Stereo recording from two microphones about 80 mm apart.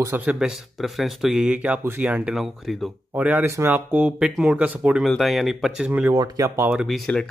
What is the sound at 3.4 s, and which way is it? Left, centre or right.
Speech, right.